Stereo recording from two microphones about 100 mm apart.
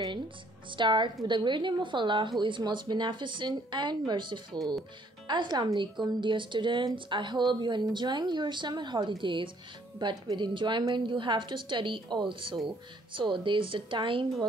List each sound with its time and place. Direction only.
0.7 s a woman's voice: 50° right (ahead or behind)